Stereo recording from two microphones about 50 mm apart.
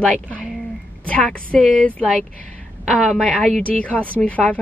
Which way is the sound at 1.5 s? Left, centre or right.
Left.